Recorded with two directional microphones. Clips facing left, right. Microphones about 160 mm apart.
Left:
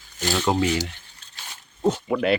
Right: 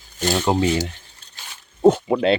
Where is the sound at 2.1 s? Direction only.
30° right (ahead or behind).